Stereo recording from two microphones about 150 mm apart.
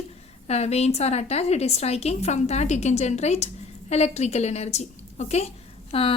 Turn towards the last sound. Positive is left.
turn(degrees=40)  # may be behind; listen again after turning